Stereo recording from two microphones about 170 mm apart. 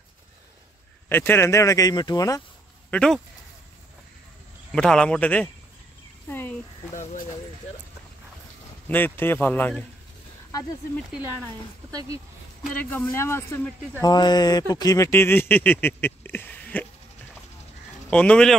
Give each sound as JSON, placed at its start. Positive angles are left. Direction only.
{"t": 1.0, "sound": "speech", "side_deg": 10}
{"t": 2.9, "sound": "speech", "side_deg": 5}
{"t": 4.7, "sound": "speech", "side_deg": 5}
{"t": 6.2, "sound": "a sound", "side_deg": 10}
{"t": 6.9, "sound": "speech", "side_deg": 45}
{"t": 8.8, "sound": "speech", "side_deg": 10}
{"t": 11.9, "sound": "speech", "side_deg": -20}
{"t": 13.1, "sound": "speech", "side_deg": 15}
{"t": 18.1, "sound": "speech", "side_deg": 5}